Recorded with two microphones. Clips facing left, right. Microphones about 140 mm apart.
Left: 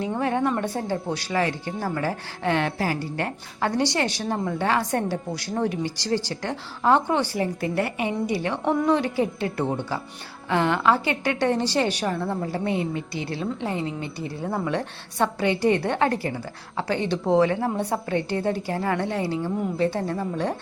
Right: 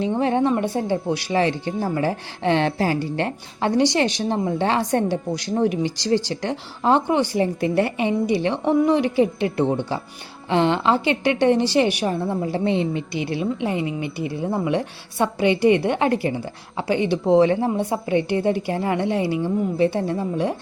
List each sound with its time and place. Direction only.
0.0 s a woman's voice: 20° right (ahead or behind)
1.3 s a woman's voice: 25° right (ahead or behind)